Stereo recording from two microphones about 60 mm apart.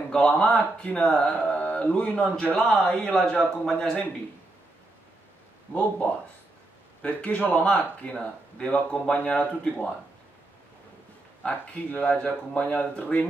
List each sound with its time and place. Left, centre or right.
0.1 s speech: centre
3.2 s a man's voice: centre
5.8 s speech: left
11.9 s speech: left